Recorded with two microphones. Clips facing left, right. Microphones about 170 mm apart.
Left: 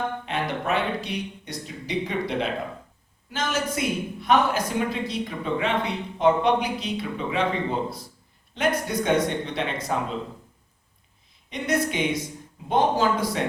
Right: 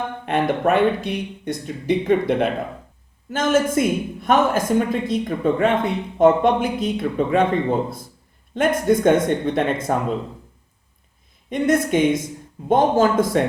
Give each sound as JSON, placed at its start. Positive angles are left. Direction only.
{"t": 0.3, "sound": "a woman's voice", "side_deg": -55}
{"t": 8.5, "sound": "a woman's voice", "side_deg": -50}
{"t": 11.4, "sound": "a woman's voice", "side_deg": -50}